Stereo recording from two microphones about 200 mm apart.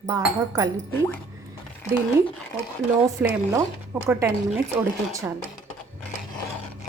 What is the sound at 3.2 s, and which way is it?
A woman's voice, 5° right (ahead or behind).